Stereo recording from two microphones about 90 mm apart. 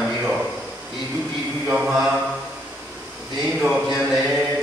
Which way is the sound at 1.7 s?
20° right (ahead or behind).